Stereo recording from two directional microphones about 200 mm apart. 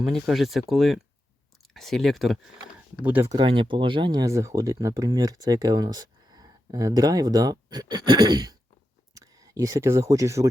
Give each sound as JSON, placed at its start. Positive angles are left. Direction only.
{"t": 0.0, "sound": "speech", "side_deg": 0}
{"t": 3.0, "sound": "speech", "side_deg": -10}
{"t": 3.3, "sound": "speech", "side_deg": -25}